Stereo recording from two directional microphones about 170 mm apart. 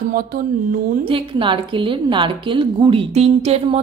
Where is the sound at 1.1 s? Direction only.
30° right (ahead or behind).